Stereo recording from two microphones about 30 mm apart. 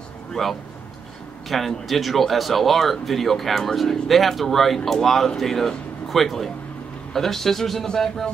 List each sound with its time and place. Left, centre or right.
0.4 s speech: centre